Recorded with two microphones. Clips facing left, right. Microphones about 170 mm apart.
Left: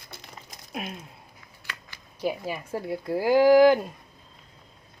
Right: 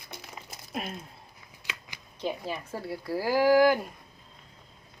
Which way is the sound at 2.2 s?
10° left (ahead or behind).